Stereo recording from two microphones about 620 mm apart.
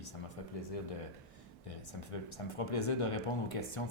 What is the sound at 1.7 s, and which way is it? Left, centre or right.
Speech, left.